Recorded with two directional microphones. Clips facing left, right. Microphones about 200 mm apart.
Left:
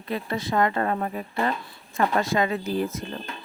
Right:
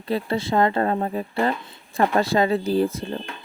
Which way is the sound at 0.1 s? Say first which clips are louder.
Right 4 dB; 30° right (ahead or behind).